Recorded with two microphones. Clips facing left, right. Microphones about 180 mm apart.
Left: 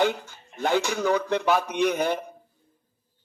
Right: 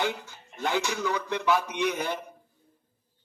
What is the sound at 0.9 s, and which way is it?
A man's voice, 55° left (ahead or behind).